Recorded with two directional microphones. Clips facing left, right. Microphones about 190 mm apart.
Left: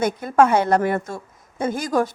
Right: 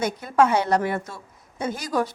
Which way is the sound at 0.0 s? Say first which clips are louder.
Left 3 dB; 50° left (ahead or behind).